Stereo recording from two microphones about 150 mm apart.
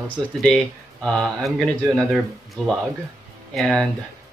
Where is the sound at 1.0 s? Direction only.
Centre (ahead or behind).